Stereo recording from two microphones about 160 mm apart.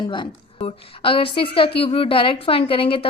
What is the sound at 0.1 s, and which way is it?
A woman's voice, 35° left (ahead or behind).